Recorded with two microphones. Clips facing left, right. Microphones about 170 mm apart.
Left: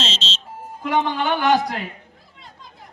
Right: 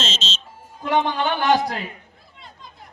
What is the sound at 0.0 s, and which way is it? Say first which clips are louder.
Music: even; 30° left (ahead or behind).